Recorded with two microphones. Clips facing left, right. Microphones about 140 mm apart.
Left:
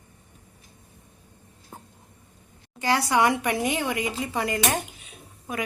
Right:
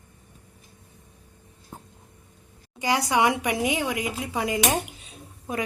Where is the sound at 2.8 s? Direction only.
15° right (ahead or behind).